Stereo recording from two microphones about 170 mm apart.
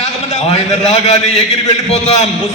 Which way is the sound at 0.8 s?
40° left (ahead or behind).